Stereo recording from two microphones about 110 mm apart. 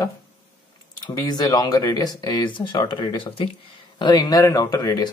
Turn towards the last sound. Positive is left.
turn(degrees=35)  # may be behind; listen again after turning